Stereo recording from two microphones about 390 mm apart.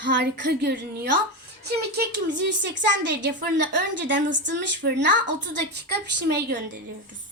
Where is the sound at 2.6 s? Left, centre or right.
Right.